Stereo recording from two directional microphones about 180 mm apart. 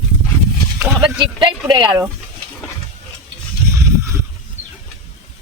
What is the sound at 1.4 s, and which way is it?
Speech, 20° right (ahead or behind).